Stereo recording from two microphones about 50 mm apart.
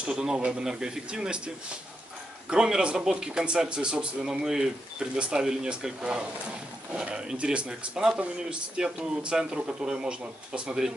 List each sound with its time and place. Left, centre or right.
0.0 s speech: centre
2.5 s speech: centre